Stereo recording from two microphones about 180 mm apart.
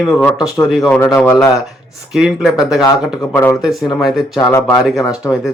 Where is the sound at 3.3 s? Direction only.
10° left (ahead or behind).